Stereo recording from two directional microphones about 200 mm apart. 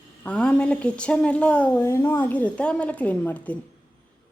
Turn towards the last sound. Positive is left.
turn(degrees=5)  # may be behind; listen again after turning